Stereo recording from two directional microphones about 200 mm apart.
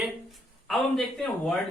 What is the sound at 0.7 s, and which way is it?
Speech, centre (ahead or behind).